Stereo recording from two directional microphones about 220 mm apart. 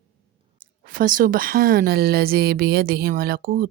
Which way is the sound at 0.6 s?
40° right (ahead or behind).